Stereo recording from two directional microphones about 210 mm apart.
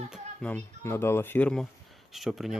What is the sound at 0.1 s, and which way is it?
Speech, 5° left (ahead or behind).